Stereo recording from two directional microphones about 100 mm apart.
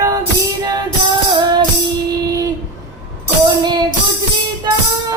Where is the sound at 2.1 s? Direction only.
40° right (ahead or behind).